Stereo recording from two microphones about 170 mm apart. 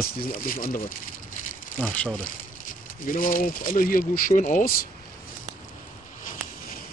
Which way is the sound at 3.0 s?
55° left (ahead or behind).